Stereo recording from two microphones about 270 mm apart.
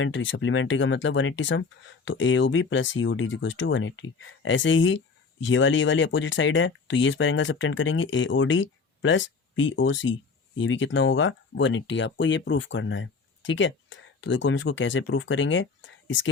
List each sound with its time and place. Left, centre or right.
0.0 s speech: left